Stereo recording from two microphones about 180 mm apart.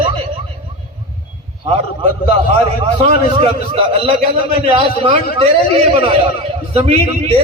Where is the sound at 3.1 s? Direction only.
30° right (ahead or behind).